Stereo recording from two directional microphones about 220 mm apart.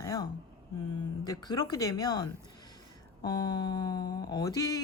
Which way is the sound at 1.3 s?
15° left (ahead or behind).